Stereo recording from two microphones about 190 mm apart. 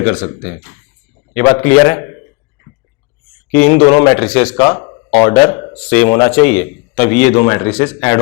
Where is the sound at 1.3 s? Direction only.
15° left (ahead or behind).